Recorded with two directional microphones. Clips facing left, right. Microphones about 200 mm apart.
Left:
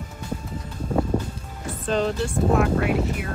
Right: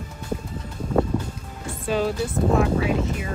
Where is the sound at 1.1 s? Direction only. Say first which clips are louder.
Left 2 dB; 30° left (ahead or behind).